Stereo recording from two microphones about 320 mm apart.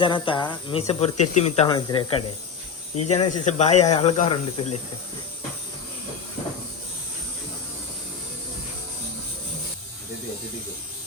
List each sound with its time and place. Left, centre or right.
0.0 s speech: centre